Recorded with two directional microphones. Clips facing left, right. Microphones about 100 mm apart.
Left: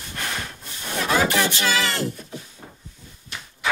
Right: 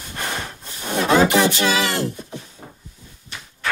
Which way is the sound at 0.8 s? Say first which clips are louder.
Right 5 dB; 20° right (ahead or behind).